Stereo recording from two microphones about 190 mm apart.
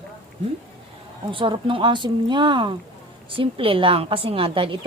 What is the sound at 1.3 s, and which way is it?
A woman's voice, 25° right (ahead or behind).